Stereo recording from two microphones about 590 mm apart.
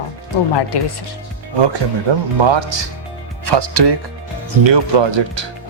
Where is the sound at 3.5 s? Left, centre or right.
Right.